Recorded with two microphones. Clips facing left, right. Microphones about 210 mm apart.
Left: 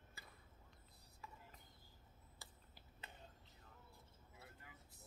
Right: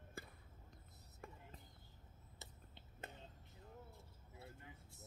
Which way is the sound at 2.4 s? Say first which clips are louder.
Right 4 dB; 25° right (ahead or behind).